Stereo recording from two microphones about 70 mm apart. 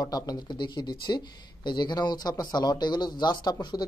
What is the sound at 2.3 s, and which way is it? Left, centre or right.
Speech, left.